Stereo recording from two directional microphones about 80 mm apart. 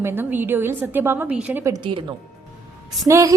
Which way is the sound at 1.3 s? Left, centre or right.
Centre.